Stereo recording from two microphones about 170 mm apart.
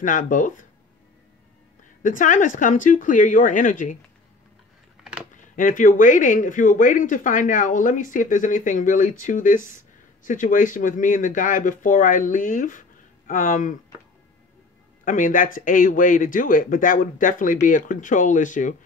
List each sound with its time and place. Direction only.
0.0 s speech: 50° left (ahead or behind)
2.0 s speech: 50° left (ahead or behind)
5.3 s speech: 50° left (ahead or behind)
15.0 s speech: 50° left (ahead or behind)